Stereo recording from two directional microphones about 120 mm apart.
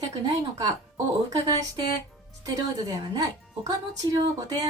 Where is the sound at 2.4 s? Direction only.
30° right (ahead or behind).